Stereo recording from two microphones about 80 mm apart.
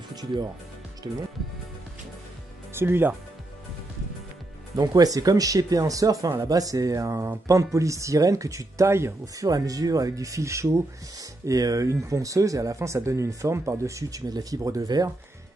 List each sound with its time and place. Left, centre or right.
0.1 s speech: right
2.7 s speech: right
4.7 s speech: right